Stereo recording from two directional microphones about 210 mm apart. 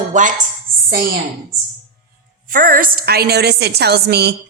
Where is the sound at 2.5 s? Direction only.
40° right (ahead or behind).